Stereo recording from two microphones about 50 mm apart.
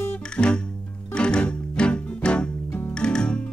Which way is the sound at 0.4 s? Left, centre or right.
Left.